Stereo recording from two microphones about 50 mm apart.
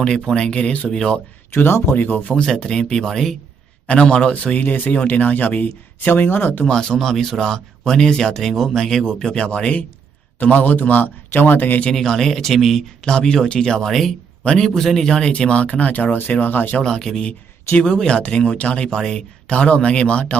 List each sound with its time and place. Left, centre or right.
0.3 s speech: centre
0.9 s speech: centre
1.5 s speech: left
2.0 s a man's voice: left
2.3 s speech: centre
3.8 s speech: left
6.7 s a man's voice: centre; by 11.8 s left
11.9 s speech: centre
13.1 s a man's voice: centre; by 16.6 s left
16.8 s speech: centre; by 20.4 s left